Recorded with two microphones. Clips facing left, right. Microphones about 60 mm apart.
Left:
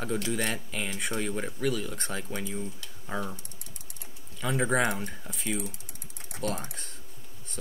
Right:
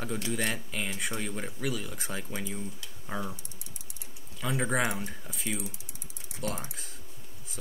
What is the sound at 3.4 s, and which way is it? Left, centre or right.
Typing, left.